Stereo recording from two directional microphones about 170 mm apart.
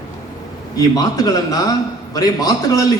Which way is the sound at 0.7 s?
20° left (ahead or behind).